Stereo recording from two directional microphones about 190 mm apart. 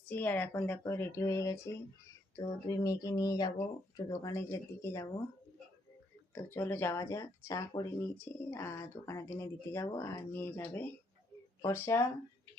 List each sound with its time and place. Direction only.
0.1 s speech: 10° left (ahead or behind)
6.3 s speech: 10° left (ahead or behind)